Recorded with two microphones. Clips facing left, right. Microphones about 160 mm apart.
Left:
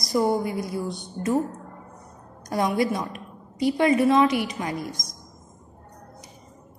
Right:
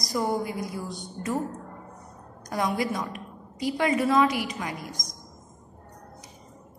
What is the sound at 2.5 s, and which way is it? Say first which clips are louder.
A woman's voice: left 4 dB; 30° left (ahead or behind).